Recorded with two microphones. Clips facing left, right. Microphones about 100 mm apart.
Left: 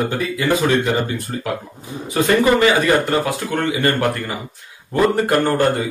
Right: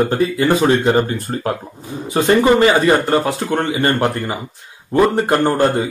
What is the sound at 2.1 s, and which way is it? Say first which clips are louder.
Speech: right 2 dB; 25° right (ahead or behind).